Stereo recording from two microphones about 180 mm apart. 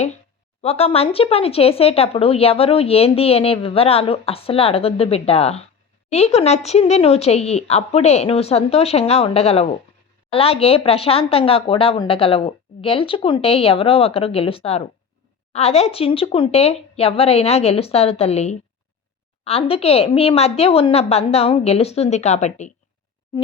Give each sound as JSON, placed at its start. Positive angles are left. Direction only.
{"t": 0.6, "sound": "speech", "side_deg": 35}